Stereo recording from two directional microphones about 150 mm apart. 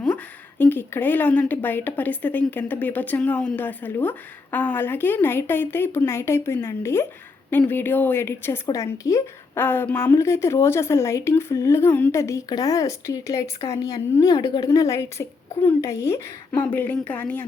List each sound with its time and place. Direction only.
0.6 s a woman's voice: 15° left (ahead or behind)